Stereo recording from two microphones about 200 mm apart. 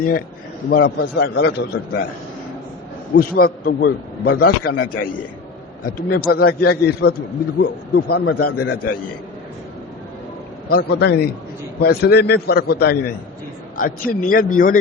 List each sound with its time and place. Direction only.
0.7 s a man's voice: 55° left (ahead or behind)
3.2 s a man's voice: 45° left (ahead or behind)
10.7 s a man's voice: 50° left (ahead or behind)